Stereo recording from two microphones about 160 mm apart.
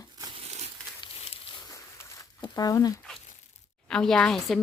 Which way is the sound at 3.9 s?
5° left (ahead or behind).